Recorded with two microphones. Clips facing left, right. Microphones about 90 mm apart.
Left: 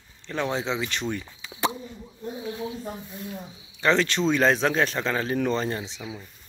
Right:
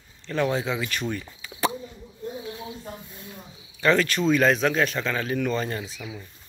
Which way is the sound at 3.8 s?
20° left (ahead or behind).